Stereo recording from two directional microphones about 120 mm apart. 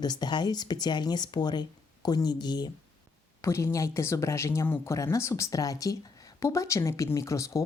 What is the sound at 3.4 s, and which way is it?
Speech, 25° left (ahead or behind).